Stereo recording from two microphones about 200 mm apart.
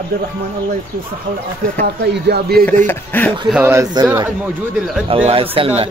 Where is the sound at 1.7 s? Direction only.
50° right (ahead or behind).